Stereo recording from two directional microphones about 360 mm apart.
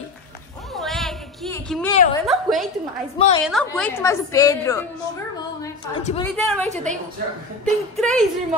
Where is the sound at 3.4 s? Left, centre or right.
Centre.